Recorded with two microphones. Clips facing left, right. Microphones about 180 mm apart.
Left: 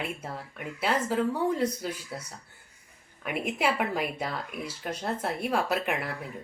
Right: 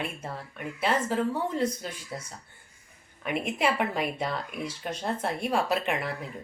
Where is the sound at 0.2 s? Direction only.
10° left (ahead or behind).